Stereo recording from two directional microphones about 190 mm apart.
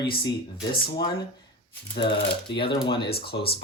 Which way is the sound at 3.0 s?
55° left (ahead or behind).